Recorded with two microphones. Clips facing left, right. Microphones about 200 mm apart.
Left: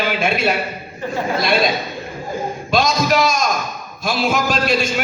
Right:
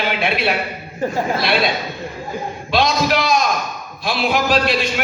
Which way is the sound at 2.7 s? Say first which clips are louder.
Even; 45° left (ahead or behind).